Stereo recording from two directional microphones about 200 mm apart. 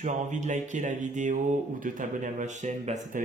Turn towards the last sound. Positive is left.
turn(degrees=-40)  # may be behind; listen again after turning